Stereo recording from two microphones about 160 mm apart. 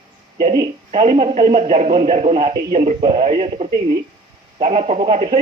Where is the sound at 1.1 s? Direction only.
35° right (ahead or behind).